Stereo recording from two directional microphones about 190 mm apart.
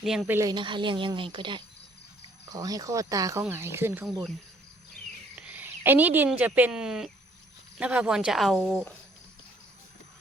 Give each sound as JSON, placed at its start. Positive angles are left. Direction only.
{"t": 0.0, "sound": "speech", "side_deg": 0}
{"t": 0.3, "sound": "a woman's voice", "side_deg": -20}
{"t": 5.5, "sound": "speech", "side_deg": -10}